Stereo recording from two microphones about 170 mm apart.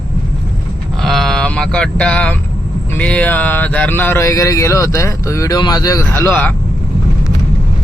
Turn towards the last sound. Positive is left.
turn(degrees=15)  # may be behind; listen again after turning